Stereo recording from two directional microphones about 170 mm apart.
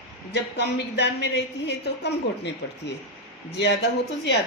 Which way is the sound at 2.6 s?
90° left.